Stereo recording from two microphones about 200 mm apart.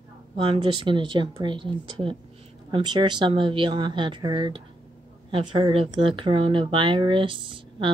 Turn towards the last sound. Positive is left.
turn(degrees=-25)  # may be behind; listen again after turning